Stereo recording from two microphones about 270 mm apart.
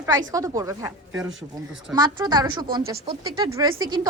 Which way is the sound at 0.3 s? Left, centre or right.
Centre.